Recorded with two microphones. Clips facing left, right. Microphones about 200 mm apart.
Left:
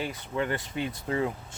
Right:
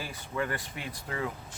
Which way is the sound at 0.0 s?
25° left (ahead or behind).